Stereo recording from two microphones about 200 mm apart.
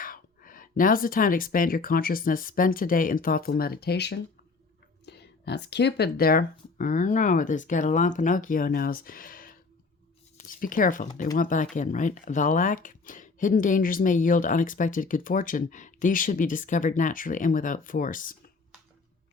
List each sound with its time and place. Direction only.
0.0 s speech: 45° left (ahead or behind)